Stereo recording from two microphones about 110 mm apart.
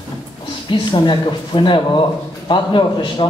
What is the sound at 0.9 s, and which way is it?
A man's voice, 45° left (ahead or behind).